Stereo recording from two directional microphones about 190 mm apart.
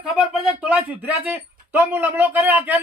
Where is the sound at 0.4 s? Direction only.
5° right (ahead or behind).